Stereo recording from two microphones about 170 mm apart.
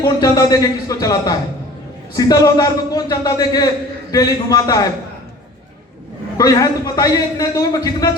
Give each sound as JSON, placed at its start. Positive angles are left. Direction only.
{"t": 0.0, "sound": "a man's voice", "side_deg": 20}
{"t": 6.3, "sound": "a man's voice", "side_deg": 20}